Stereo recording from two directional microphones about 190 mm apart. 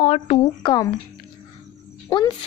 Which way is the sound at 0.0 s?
30° left (ahead or behind).